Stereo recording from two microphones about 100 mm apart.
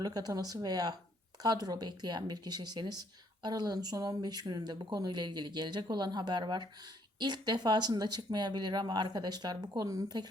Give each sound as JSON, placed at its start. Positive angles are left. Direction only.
{"t": 0.0, "sound": "speech", "side_deg": -40}